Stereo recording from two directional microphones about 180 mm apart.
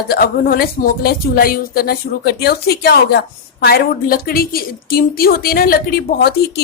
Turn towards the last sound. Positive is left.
turn(degrees=55)  # may be behind; listen again after turning